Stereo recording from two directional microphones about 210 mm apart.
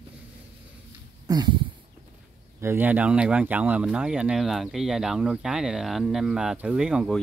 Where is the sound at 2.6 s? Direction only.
10° right (ahead or behind).